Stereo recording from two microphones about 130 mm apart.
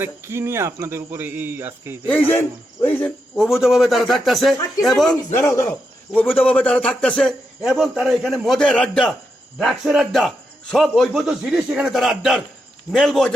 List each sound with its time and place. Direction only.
0.0 s a man's voice: 20° right (ahead or behind)
2.0 s speech: 10° left (ahead or behind)
2.8 s cricket: 15° left (ahead or behind)
3.3 s a man's voice: 5° right (ahead or behind)
5.3 s a man's voice: 20° left (ahead or behind); by 13.3 s 5° left (ahead or behind)